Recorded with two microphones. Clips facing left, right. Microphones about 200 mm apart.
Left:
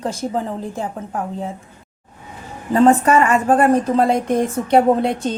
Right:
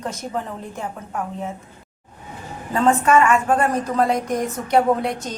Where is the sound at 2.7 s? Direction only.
35° left (ahead or behind).